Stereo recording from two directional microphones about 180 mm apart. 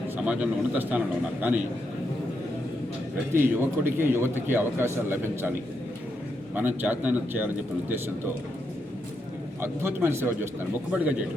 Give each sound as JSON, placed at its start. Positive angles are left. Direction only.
{"t": 0.3, "sound": "a man's voice", "side_deg": -10}
{"t": 3.3, "sound": "a man's voice", "side_deg": -10}
{"t": 9.6, "sound": "a man's voice", "side_deg": -15}